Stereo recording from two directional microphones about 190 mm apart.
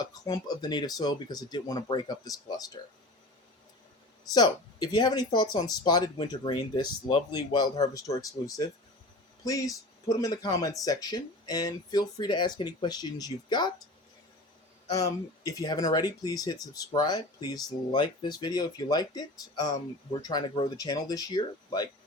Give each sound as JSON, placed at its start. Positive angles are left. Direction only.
{"t": 0.0, "sound": "speech", "side_deg": 20}
{"t": 4.4, "sound": "speech", "side_deg": 20}
{"t": 14.8, "sound": "speech", "side_deg": 20}